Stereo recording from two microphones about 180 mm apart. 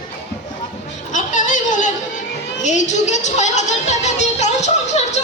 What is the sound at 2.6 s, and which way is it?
Music, 40° left (ahead or behind).